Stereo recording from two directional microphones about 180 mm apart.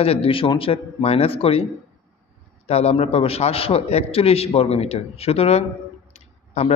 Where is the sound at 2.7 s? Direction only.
35° left (ahead or behind).